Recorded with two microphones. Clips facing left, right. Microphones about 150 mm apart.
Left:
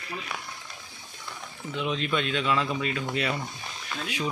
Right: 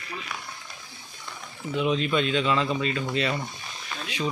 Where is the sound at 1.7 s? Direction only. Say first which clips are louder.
Right 4 dB; centre (ahead or behind).